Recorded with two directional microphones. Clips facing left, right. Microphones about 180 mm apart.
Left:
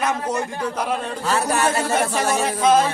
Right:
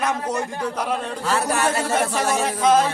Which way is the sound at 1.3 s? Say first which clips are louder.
Left 1 dB; 20° left (ahead or behind).